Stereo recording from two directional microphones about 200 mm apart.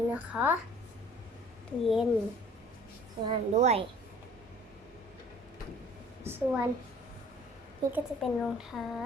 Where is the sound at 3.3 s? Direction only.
35° right (ahead or behind).